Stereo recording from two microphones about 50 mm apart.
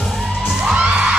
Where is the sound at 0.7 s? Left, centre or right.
Right.